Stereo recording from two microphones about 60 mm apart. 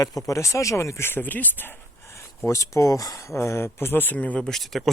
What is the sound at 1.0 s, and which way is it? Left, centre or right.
Speech, left.